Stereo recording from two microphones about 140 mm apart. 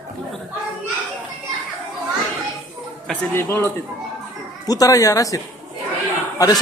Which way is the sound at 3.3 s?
15° left (ahead or behind).